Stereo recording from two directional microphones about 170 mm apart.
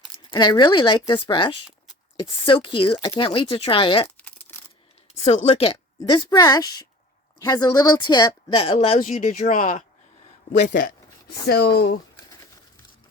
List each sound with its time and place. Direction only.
0.3 s speech: 25° left (ahead or behind)
4.0 s crumpling: 10° left (ahead or behind)
5.2 s speech: 40° left (ahead or behind)
9.0 s speech: 45° left (ahead or behind)
11.4 s speech: 70° left (ahead or behind)